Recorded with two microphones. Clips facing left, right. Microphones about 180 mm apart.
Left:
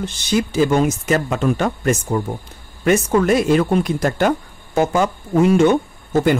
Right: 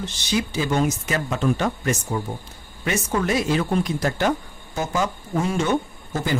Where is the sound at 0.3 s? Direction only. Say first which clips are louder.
Left 7 dB; 50° left (ahead or behind).